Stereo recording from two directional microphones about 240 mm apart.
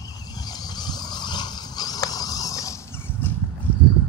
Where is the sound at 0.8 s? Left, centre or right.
Centre.